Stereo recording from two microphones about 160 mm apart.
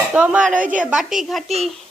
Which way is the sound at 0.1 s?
5° right (ahead or behind).